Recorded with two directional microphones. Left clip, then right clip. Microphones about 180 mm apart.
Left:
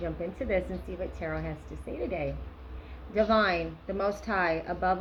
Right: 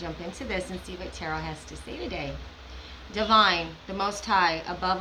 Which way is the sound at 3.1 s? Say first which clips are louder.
Right 4 dB; 15° right (ahead or behind).